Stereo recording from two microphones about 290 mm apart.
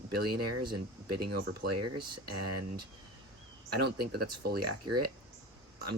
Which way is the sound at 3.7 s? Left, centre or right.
Right.